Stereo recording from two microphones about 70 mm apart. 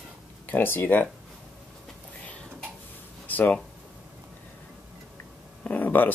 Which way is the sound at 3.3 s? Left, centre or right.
Left.